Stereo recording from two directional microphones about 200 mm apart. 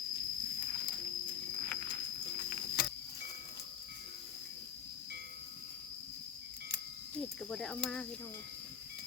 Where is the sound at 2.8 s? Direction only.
50° left (ahead or behind).